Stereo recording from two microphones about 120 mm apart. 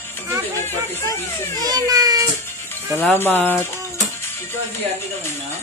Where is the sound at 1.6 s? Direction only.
30° right (ahead or behind).